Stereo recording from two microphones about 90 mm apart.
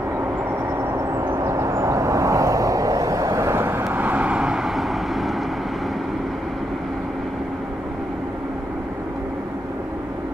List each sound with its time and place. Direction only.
0.9 s vehicle: 40° right (ahead or behind); by 5.3 s centre (ahead or behind)